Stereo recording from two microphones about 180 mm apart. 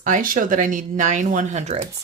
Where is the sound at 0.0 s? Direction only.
45° right (ahead or behind).